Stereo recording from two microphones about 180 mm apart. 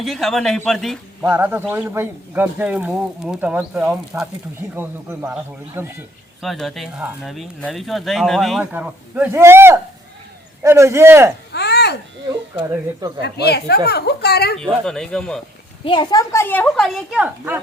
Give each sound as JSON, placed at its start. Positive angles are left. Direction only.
{"t": 0.0, "sound": "speech", "side_deg": 0}
{"t": 1.2, "sound": "speech", "side_deg": -10}
{"t": 6.4, "sound": "speech", "side_deg": 0}
{"t": 11.5, "sound": "babbling", "side_deg": 65}
{"t": 13.2, "sound": "speech", "side_deg": 65}
{"t": 14.6, "sound": "speech", "side_deg": 0}
{"t": 15.8, "sound": "a child's voice", "side_deg": 25}
{"t": 16.3, "sound": "speech", "side_deg": 10}